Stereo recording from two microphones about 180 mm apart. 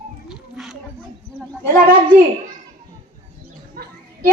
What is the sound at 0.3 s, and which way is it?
Music, 5° right (ahead or behind).